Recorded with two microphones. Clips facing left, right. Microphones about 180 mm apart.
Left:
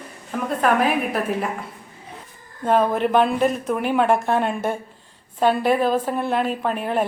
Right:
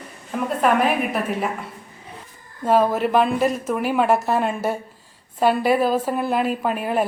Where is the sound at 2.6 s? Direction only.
5° right (ahead or behind).